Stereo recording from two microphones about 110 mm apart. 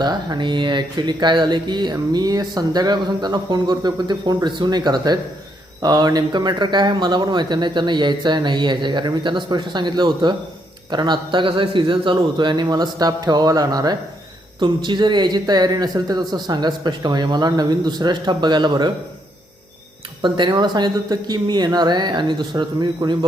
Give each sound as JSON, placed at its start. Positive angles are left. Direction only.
{"t": 0.0, "sound": "speech", "side_deg": -40}
{"t": 20.2, "sound": "speech", "side_deg": -45}